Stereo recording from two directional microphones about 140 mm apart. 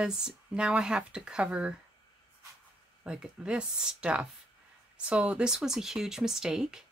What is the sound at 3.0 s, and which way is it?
Speech, 5° right (ahead or behind).